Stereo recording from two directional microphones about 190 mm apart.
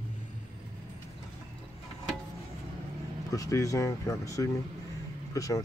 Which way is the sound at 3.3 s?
15° left (ahead or behind).